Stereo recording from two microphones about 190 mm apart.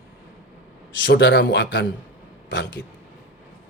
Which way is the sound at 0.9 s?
75° left (ahead or behind).